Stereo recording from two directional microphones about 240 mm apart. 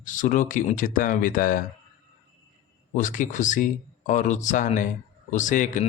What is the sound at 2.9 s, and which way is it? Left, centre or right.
Speech, left.